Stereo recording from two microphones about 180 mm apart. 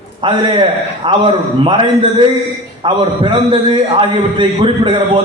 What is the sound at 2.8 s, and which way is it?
A man's voice, 30° right (ahead or behind).